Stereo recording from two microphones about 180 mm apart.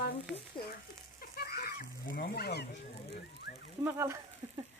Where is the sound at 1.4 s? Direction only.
60° left (ahead or behind).